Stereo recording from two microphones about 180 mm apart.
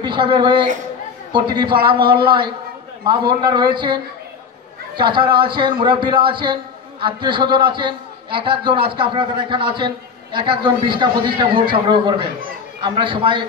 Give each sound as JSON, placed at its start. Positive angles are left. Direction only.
{"t": 0.0, "sound": "a man's voice", "side_deg": -25}